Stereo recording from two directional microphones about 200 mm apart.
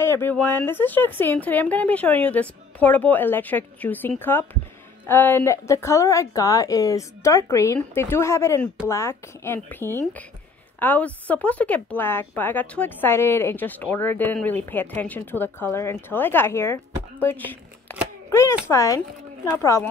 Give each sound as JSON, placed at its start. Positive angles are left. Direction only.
{"t": 0.0, "sound": "a child's voice", "side_deg": 10}